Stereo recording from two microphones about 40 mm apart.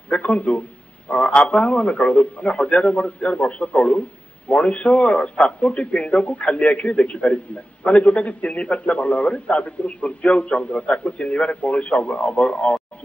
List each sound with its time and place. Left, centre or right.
0.2 s a man's voice: left